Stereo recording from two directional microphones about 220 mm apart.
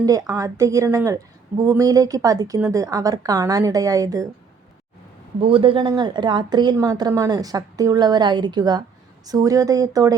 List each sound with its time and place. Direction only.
0.0 s a woman's voice: 15° right (ahead or behind)
5.4 s a woman's voice: 25° right (ahead or behind)